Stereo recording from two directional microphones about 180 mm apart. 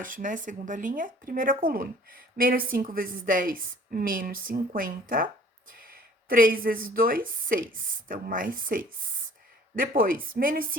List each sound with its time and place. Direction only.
0.0 s speech: 45° right (ahead or behind)